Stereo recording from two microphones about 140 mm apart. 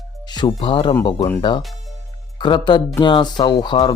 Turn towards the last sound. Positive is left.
turn(degrees=30)  # may be behind; listen again after turning